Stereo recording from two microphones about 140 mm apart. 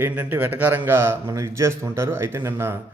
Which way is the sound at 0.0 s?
15° right (ahead or behind).